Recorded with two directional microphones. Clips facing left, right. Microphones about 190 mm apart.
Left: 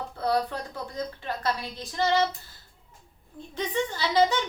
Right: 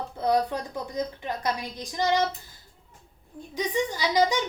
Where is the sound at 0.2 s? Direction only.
20° right (ahead or behind).